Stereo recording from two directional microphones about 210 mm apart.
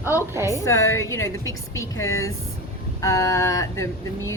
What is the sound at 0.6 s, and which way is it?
A woman's voice, 10° left (ahead or behind).